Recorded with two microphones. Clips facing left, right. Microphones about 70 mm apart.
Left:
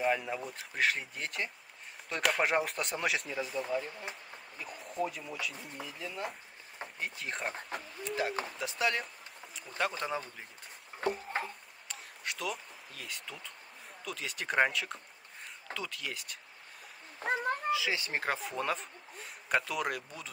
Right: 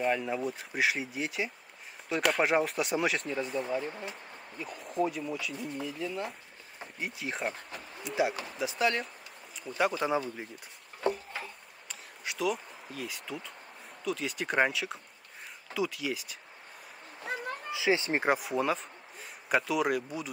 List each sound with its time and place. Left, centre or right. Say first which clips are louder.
0.0 s speech: right 2 dB; centre
11.0 s a sound: right 3 dB; left
11.9 s a sound: even; centre
14.0 s speech: right 5 dB; centre
17.2 s cat: left 4 dB; left
17.6 s speech: right 3 dB; right
18.4 s speech: right 4 dB; centre